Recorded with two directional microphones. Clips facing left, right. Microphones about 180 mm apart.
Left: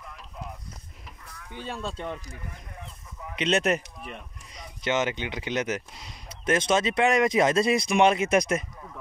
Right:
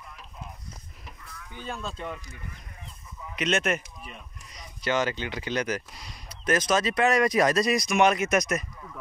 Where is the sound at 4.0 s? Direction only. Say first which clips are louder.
Left 4 dB; 60° left (ahead or behind).